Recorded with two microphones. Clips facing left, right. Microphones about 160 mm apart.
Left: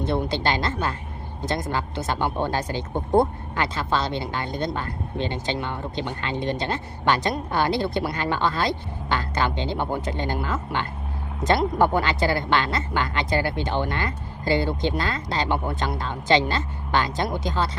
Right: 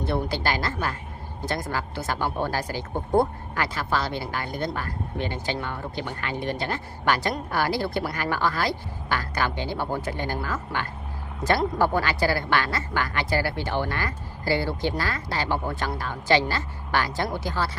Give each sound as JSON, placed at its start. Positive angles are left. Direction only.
{"t": 0.0, "sound": "a woman's voice", "side_deg": 20}